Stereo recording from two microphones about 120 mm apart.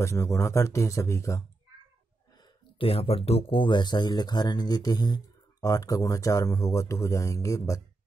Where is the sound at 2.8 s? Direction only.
55° left (ahead or behind).